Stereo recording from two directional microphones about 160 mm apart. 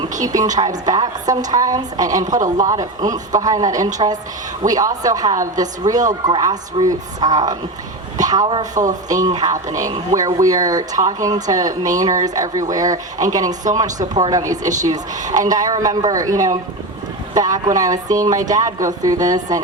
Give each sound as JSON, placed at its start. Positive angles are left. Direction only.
{"t": 0.3, "sound": "speech", "side_deg": -25}